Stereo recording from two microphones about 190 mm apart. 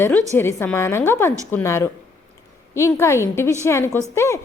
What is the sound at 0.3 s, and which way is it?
A woman's voice, 10° left (ahead or behind).